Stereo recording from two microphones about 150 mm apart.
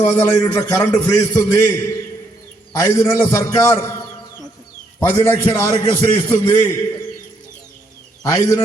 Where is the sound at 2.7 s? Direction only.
15° left (ahead or behind).